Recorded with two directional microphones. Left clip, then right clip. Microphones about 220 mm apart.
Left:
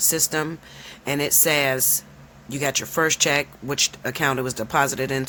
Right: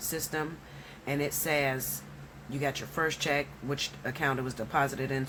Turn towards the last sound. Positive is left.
turn(degrees=50)  # may be behind; listen again after turning